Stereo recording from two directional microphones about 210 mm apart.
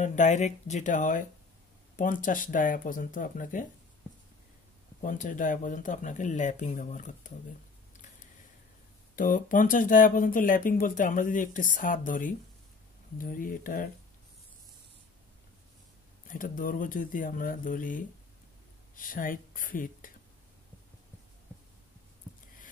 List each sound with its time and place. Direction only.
0.0 s speech: 35° left (ahead or behind)
5.2 s speech: 40° left (ahead or behind)
9.1 s speech: 40° left (ahead or behind)
16.3 s speech: 40° left (ahead or behind)